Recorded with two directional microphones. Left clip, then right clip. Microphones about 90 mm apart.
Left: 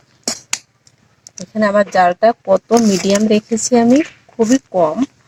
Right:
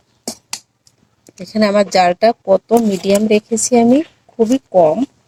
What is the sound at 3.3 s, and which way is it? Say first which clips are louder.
Speech: right 1 dB; 40° right (ahead or behind).